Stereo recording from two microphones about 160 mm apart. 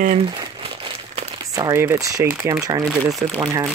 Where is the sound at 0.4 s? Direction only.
30° right (ahead or behind).